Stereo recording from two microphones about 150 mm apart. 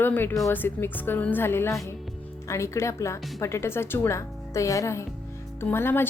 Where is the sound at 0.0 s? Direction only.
15° left (ahead or behind).